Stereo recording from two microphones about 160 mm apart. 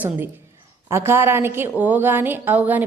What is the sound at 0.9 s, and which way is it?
A woman's voice, 15° right (ahead or behind).